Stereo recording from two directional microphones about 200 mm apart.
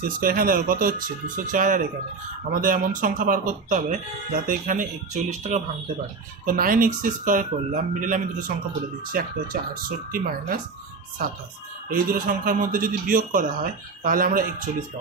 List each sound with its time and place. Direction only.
0.0 s speech: 45° right (ahead or behind)
11.9 s speech: 45° right (ahead or behind)